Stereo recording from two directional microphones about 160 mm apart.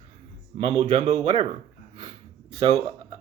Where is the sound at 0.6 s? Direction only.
40° right (ahead or behind).